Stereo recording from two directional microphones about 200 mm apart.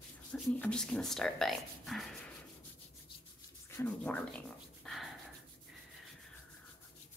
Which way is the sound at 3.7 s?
10° left (ahead or behind).